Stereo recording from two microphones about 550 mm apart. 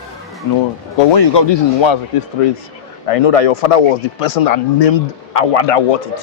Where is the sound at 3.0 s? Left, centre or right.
Left.